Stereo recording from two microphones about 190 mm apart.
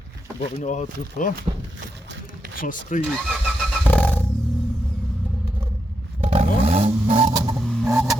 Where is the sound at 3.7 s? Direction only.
5° left (ahead or behind).